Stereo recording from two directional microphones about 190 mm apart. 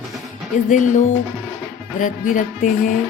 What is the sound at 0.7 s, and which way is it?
Music, 40° left (ahead or behind).